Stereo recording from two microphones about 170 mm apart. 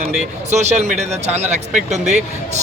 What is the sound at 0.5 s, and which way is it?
Speech, 40° right (ahead or behind).